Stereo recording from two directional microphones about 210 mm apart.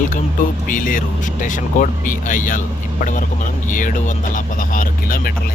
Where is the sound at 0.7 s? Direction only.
40° left (ahead or behind).